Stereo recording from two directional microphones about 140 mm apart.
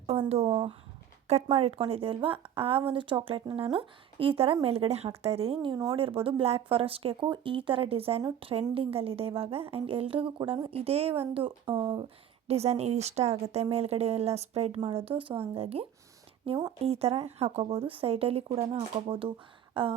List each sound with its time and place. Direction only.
0.1 s speech: 45° right (ahead or behind)
5.7 s speech: 30° right (ahead or behind)
6.0 s speech: 40° right (ahead or behind)
15.1 s speech: 35° right (ahead or behind)
19.7 s a sound: 40° right (ahead or behind)